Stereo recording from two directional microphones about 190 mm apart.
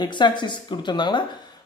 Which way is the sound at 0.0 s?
25° left (ahead or behind).